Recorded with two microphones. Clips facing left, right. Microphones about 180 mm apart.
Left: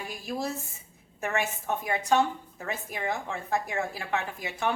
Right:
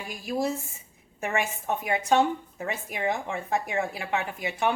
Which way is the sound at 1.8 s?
20° right (ahead or behind).